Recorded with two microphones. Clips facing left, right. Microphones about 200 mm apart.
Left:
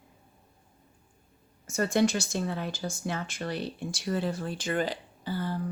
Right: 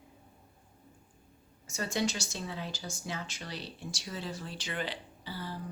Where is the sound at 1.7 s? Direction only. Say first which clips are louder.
Left 8 dB; 55° left (ahead or behind).